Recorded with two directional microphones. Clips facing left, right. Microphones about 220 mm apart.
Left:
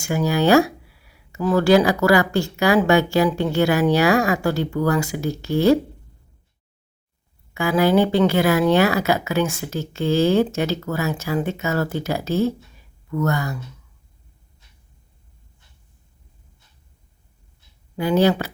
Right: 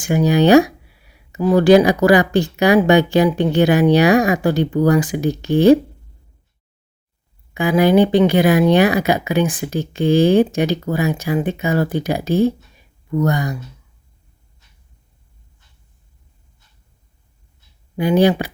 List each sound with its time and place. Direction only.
0.0 s speech: 20° right (ahead or behind)
7.5 s speech: 15° right (ahead or behind)
17.9 s speech: 15° right (ahead or behind)